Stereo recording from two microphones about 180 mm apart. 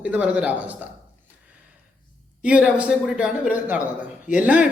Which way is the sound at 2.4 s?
5° right (ahead or behind).